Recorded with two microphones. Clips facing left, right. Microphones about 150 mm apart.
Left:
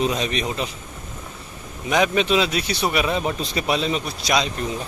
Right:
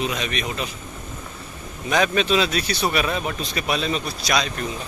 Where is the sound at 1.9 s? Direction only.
15° left (ahead or behind).